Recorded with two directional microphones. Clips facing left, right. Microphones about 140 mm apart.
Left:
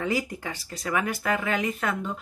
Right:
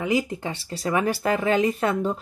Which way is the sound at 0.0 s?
25° right (ahead or behind).